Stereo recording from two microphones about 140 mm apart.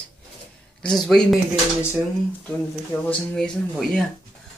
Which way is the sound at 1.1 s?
5° left (ahead or behind).